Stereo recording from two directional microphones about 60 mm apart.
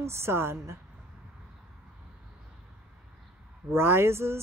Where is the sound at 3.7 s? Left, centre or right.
Right.